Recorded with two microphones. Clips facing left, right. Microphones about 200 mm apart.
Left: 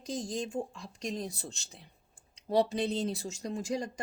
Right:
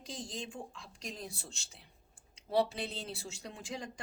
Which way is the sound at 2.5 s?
40° left (ahead or behind).